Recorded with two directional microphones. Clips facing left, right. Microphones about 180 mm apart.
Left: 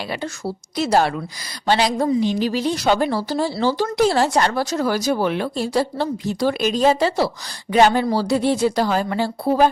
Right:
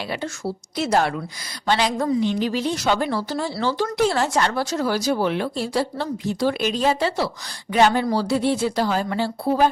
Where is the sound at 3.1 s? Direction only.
35° left (ahead or behind).